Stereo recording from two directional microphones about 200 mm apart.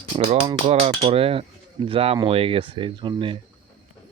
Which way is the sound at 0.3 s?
30° right (ahead or behind).